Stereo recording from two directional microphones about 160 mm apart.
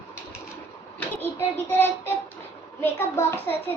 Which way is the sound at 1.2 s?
10° left (ahead or behind).